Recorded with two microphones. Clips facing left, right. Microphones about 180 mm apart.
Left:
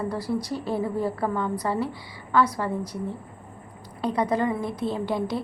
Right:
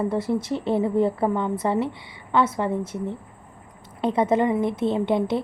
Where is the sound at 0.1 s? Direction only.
25° right (ahead or behind).